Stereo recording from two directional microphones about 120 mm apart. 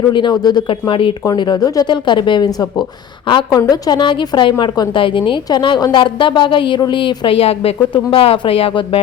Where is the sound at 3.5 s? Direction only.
35° left (ahead or behind).